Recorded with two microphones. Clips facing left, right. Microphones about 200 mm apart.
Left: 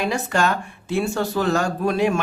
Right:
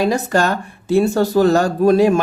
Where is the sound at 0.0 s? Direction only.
40° right (ahead or behind).